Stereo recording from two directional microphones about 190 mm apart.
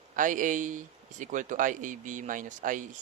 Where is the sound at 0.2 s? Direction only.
45° right (ahead or behind).